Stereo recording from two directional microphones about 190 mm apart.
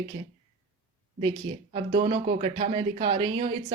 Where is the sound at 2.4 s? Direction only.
30° right (ahead or behind).